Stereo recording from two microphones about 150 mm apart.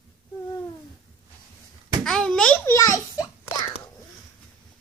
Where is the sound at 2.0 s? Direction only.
5° left (ahead or behind).